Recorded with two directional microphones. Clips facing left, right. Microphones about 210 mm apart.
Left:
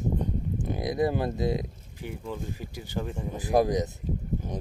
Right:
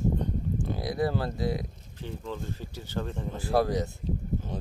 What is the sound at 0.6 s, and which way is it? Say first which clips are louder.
Speech: left 3 dB; 20° left (ahead or behind).